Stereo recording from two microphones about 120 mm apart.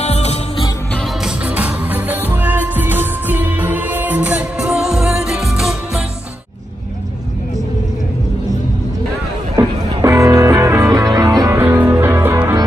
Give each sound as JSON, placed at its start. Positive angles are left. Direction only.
{"t": 0.0, "sound": "music", "side_deg": 65}
{"t": 1.2, "sound": "music", "side_deg": -10}
{"t": 9.6, "sound": "music", "side_deg": -25}
{"t": 11.6, "sound": "music", "side_deg": -15}